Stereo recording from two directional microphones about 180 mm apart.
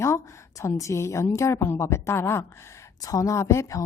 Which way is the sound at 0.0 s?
15° left (ahead or behind).